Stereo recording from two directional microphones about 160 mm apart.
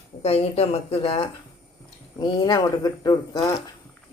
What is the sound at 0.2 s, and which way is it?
Speech, 40° left (ahead or behind).